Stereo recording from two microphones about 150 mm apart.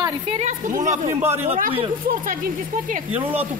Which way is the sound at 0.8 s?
55° right (ahead or behind).